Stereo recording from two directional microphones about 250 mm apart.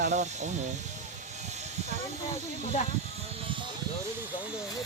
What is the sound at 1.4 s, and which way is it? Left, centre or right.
Snake, right.